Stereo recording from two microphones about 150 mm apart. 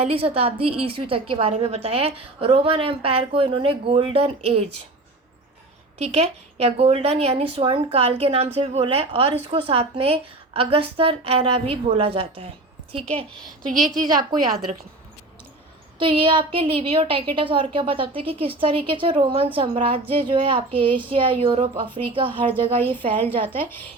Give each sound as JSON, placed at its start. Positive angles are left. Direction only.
{"t": 0.0, "sound": "a woman's voice", "side_deg": -40}
{"t": 6.0, "sound": "a woman's voice", "side_deg": -45}
{"t": 13.9, "sound": "a woman's voice", "side_deg": -25}
{"t": 16.0, "sound": "a woman's voice", "side_deg": -35}
{"t": 22.8, "sound": "a woman's voice", "side_deg": 15}